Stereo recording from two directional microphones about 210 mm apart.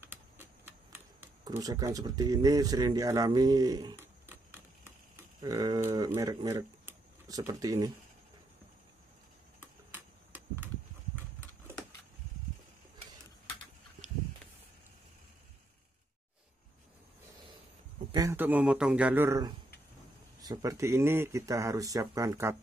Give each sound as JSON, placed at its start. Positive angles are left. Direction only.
{"t": 0.0, "sound": "camera", "side_deg": -10}
{"t": 5.1, "sound": "speech", "side_deg": -15}
{"t": 18.1, "sound": "speech", "side_deg": -15}